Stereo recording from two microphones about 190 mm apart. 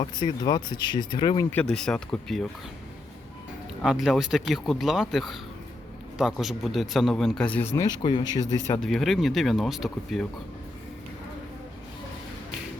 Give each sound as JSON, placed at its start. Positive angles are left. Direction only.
{"t": 0.0, "sound": "speech", "side_deg": 25}
{"t": 1.5, "sound": "a man's voice", "side_deg": 10}
{"t": 3.8, "sound": "a man's voice", "side_deg": 0}
{"t": 8.8, "sound": "a man's voice", "side_deg": 0}